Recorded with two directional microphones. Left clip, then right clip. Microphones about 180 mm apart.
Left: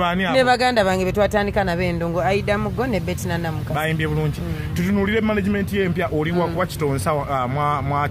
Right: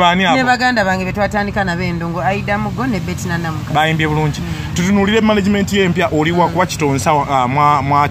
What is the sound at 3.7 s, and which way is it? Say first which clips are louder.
Speech: right 9 dB; 10° right (ahead or behind).